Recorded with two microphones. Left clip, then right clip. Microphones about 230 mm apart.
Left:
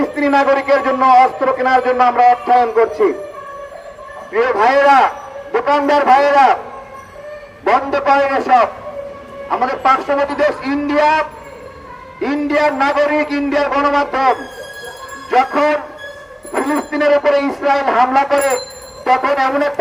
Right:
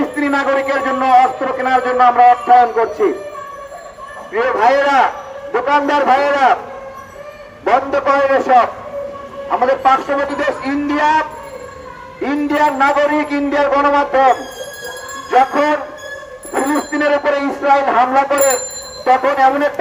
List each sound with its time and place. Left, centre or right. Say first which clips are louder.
0.0 s a man's voice: left 3 dB; left
4.3 s a man's voice: even; left
7.6 s a man's voice: even; left